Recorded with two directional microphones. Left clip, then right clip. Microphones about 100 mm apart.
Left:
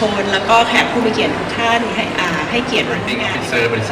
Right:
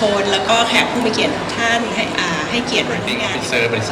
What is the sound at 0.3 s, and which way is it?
Speech, 20° right (ahead or behind).